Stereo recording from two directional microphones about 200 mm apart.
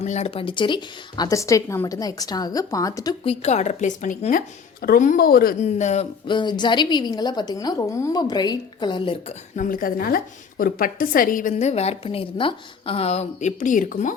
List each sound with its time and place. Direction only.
0.0 s a woman's voice: 35° left (ahead or behind)
3.4 s a woman's voice: 35° left (ahead or behind)
5.6 s a woman's voice: 35° left (ahead or behind)
9.6 s a woman's voice: 45° left (ahead or behind)